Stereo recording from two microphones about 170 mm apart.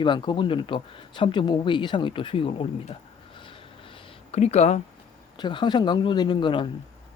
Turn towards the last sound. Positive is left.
turn(degrees=30)  # may be behind; listen again after turning